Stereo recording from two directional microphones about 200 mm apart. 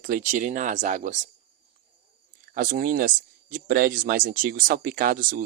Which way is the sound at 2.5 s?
45° right (ahead or behind).